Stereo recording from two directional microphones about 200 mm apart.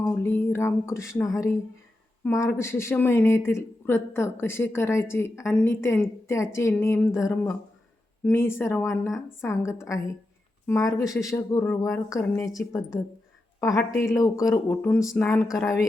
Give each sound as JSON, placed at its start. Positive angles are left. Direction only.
{"t": 0.0, "sound": "speech", "side_deg": 10}
{"t": 14.0, "sound": "speech", "side_deg": 15}